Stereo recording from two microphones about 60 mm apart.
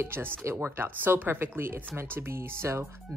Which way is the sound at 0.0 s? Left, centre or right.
Right.